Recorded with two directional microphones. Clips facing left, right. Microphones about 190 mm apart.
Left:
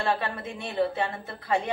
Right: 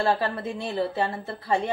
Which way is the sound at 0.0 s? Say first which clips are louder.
Right 4 dB; 35° right (ahead or behind).